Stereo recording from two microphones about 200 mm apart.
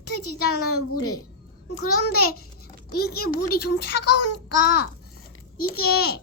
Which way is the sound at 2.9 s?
50° left (ahead or behind).